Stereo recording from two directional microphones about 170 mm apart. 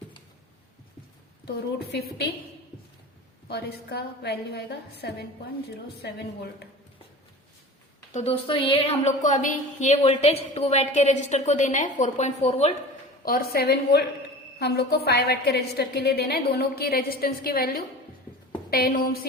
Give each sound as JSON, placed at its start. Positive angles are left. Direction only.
{"t": 1.5, "sound": "a woman's voice", "side_deg": 75}
{"t": 3.5, "sound": "a woman's voice", "side_deg": 70}
{"t": 8.1, "sound": "a woman's voice", "side_deg": 35}
{"t": 13.2, "sound": "a woman's voice", "side_deg": 60}